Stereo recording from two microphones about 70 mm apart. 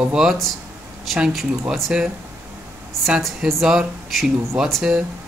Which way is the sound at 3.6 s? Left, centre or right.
Centre.